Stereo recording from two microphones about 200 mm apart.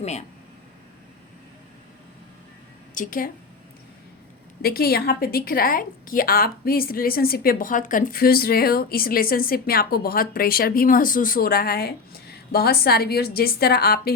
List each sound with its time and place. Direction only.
0.0 s speech: 35° left (ahead or behind)
2.9 s a woman's voice: 40° left (ahead or behind)
4.6 s a woman's voice: 50° left (ahead or behind)